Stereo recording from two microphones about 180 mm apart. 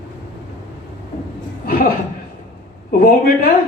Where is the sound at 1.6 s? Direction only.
55° left (ahead or behind).